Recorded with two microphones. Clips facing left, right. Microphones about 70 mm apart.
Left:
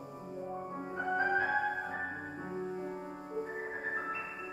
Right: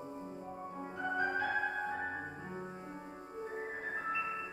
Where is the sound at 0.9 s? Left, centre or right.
Left.